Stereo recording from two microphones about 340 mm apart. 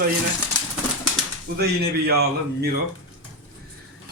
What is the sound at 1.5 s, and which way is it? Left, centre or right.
A man's voice, right.